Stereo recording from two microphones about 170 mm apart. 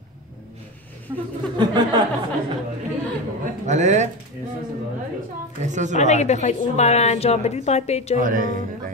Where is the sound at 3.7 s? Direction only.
45° right (ahead or behind).